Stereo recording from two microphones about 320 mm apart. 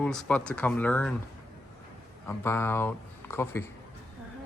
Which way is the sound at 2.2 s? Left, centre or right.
Centre.